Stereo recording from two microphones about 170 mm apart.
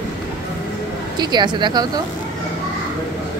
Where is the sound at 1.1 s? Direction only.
25° right (ahead or behind).